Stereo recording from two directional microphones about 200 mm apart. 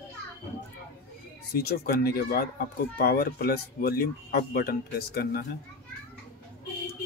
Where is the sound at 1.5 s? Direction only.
55° left (ahead or behind).